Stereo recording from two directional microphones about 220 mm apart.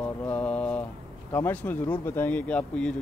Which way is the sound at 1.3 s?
10° left (ahead or behind).